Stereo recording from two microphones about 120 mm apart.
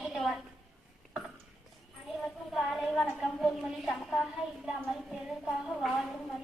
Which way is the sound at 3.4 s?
Centre (ahead or behind).